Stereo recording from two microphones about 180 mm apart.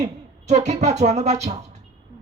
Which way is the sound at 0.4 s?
40° right (ahead or behind).